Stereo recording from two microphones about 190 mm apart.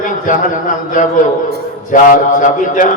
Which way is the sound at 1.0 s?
45° left (ahead or behind).